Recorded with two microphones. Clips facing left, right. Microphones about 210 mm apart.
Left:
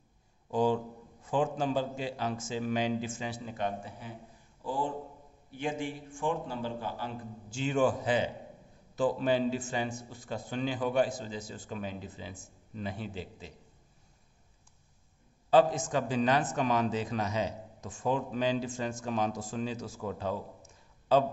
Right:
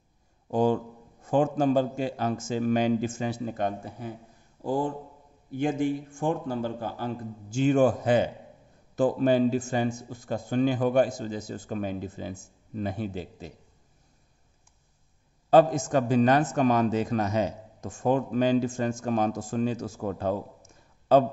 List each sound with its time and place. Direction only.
0.5 s a man's voice: 45° right (ahead or behind)
15.5 s a man's voice: 45° right (ahead or behind)